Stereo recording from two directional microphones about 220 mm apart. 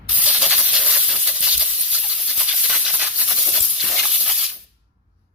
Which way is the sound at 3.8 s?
Centre (ahead or behind).